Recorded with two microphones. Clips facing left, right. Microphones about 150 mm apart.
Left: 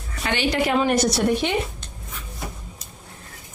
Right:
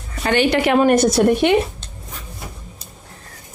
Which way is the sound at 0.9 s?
50° right (ahead or behind).